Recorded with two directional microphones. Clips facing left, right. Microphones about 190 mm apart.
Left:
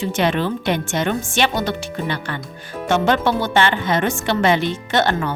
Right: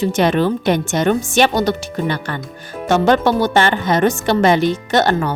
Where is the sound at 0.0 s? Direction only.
40° right (ahead or behind).